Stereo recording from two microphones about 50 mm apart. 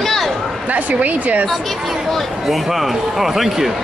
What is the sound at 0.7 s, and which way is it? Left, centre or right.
Speech, right.